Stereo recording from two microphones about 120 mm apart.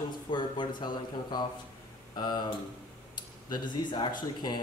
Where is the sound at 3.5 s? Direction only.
40° left (ahead or behind).